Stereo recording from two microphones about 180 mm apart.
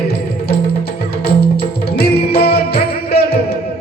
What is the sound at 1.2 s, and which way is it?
Music, 60° left (ahead or behind).